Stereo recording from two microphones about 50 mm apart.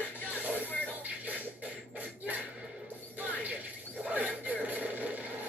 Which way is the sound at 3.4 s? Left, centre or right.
Right.